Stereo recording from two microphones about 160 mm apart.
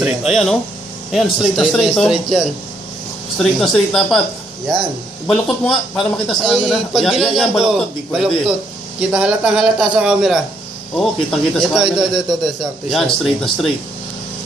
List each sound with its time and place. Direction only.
0.0 s a man's voice: centre (ahead or behind)
3.5 s a man's voice: centre (ahead or behind)
5.2 s a man's voice: 5° left (ahead or behind)